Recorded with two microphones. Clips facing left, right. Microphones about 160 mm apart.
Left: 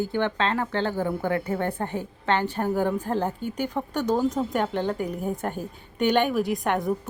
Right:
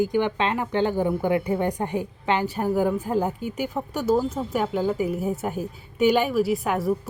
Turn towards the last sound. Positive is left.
turn(degrees=0)  # may be behind; listen again after turning